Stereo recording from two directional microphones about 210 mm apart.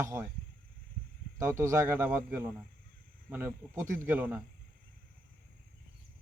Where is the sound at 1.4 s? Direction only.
15° right (ahead or behind).